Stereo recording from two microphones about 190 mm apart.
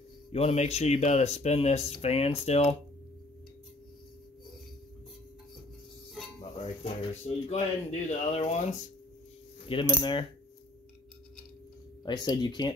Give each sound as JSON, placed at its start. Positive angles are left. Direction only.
{"t": 0.3, "sound": "speech", "side_deg": 35}
{"t": 6.6, "sound": "speech", "side_deg": 30}
{"t": 9.7, "sound": "speech", "side_deg": 25}
{"t": 12.0, "sound": "speech", "side_deg": 20}